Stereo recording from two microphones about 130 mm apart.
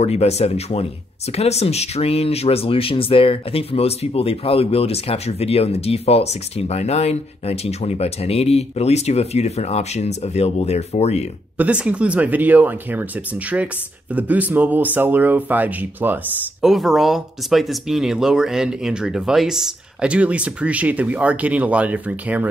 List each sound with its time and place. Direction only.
0.0 s speech: 55° left (ahead or behind)
11.5 s speech: 10° right (ahead or behind)
14.1 s speech: 10° right (ahead or behind)
16.6 s speech: centre (ahead or behind)